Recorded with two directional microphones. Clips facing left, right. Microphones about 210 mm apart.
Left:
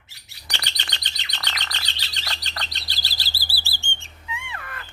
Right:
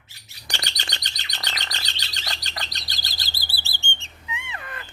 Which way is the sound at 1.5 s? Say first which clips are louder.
Even; 45° right (ahead or behind).